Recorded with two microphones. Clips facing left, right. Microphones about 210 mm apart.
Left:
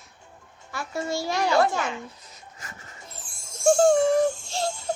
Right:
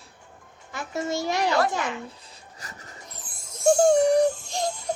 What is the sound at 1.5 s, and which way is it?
Speech, 25° left (ahead or behind).